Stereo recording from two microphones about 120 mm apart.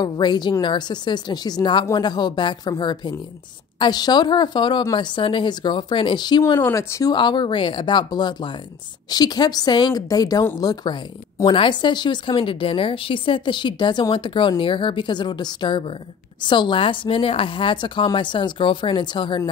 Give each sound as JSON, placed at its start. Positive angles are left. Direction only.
{"t": 0.0, "sound": "a woman's voice", "side_deg": 35}
{"t": 6.5, "sound": "speech", "side_deg": 25}
{"t": 7.1, "sound": "a woman's voice", "side_deg": 40}